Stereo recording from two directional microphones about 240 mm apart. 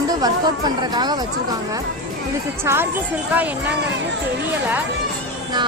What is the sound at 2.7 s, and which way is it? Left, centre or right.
Speech, centre.